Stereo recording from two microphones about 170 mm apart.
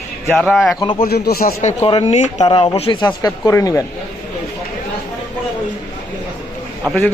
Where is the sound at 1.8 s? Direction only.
35° left (ahead or behind).